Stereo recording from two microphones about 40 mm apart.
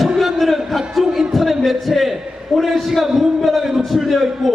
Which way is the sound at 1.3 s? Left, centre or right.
Centre.